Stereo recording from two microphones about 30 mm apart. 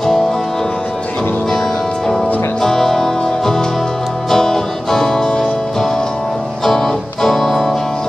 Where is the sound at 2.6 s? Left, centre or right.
Centre.